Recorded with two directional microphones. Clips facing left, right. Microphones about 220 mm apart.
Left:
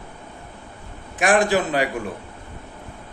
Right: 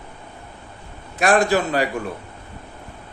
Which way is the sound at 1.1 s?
15° left (ahead or behind).